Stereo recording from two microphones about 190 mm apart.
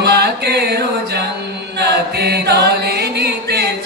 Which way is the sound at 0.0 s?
55° right (ahead or behind).